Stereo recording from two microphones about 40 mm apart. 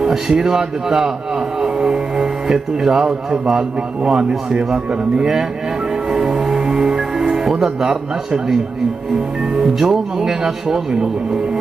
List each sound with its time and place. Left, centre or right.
0.1 s a man's voice: centre
6.1 s music: centre
7.6 s a man's voice: centre
9.6 s a man's voice: centre